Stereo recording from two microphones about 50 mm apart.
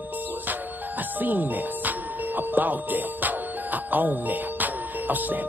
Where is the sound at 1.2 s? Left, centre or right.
Right.